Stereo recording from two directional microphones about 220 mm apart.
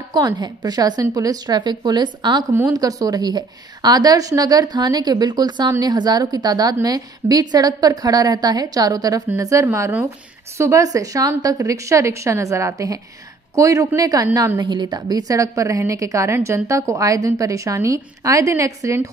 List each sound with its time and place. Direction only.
0.1 s a woman's voice: 20° right (ahead or behind)